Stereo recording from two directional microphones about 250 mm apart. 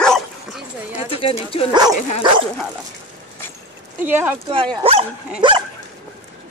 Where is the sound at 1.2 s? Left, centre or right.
Left.